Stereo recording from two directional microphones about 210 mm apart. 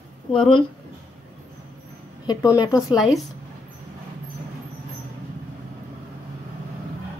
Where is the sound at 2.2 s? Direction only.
20° left (ahead or behind).